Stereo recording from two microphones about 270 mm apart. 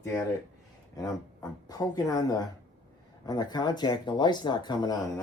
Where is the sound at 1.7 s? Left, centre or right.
Centre.